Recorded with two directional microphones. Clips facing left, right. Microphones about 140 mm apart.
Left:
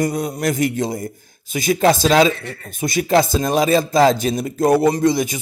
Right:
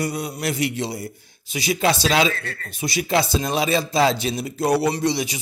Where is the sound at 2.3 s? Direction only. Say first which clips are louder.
Left 4 dB; 15° left (ahead or behind).